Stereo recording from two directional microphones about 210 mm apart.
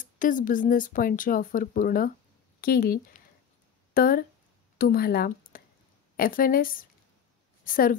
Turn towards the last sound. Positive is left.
turn(degrees=40)  # may be behind; listen again after turning